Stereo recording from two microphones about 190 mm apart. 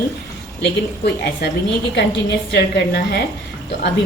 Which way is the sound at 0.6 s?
60° left (ahead or behind).